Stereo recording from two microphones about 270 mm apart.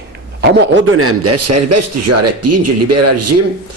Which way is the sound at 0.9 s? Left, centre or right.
Right.